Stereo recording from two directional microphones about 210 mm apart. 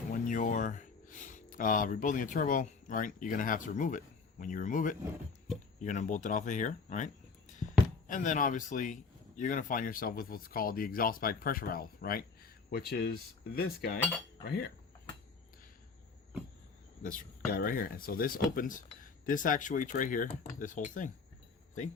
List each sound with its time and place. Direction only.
0.1 s speech: 40° left (ahead or behind)
17.0 s speech: 40° left (ahead or behind)